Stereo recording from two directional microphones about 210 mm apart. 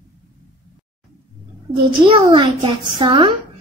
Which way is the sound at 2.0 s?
25° right (ahead or behind).